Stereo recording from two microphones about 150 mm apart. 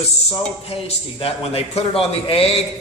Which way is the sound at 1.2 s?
40° left (ahead or behind).